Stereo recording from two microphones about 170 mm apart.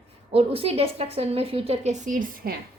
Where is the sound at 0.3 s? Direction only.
35° right (ahead or behind).